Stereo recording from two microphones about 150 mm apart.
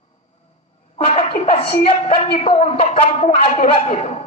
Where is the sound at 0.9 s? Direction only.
45° left (ahead or behind).